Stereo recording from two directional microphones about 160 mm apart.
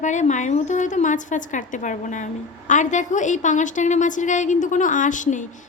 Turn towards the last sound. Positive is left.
turn(degrees=50)  # may be behind; listen again after turning